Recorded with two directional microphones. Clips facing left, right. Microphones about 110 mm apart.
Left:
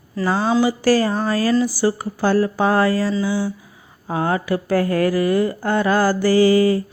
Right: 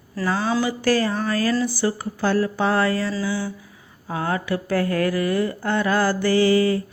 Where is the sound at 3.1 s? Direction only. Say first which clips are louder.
Left 4 dB; 15° left (ahead or behind).